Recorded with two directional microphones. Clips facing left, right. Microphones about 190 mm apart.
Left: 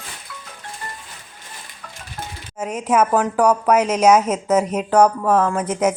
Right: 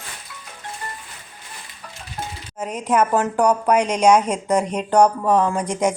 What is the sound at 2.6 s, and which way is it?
A woman's voice, 5° left (ahead or behind).